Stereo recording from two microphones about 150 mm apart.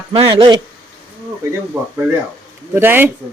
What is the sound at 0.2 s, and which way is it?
Speech, 30° right (ahead or behind).